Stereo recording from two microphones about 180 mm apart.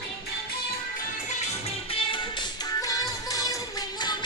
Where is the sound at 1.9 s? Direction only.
25° left (ahead or behind).